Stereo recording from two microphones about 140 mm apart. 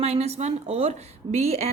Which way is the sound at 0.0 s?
50° right (ahead or behind).